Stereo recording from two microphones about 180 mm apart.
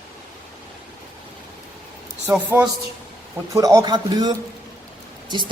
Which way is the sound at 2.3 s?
10° right (ahead or behind).